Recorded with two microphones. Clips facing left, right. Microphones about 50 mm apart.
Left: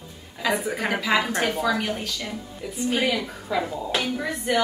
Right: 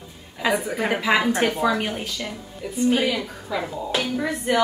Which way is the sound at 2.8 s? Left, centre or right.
Centre.